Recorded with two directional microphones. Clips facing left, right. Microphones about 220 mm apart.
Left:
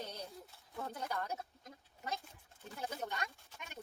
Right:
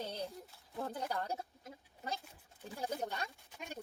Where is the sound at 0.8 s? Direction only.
30° right (ahead or behind).